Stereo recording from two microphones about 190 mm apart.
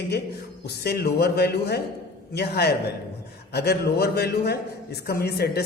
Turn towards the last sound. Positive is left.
turn(degrees=55)  # may be behind; listen again after turning